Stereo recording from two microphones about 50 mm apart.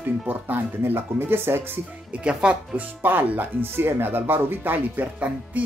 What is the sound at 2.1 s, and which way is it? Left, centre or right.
Speech, right.